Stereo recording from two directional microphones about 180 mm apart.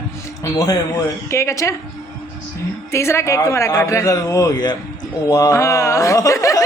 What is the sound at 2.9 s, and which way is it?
Speech, 15° left (ahead or behind).